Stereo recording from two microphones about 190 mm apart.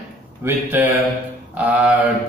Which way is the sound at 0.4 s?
10° right (ahead or behind).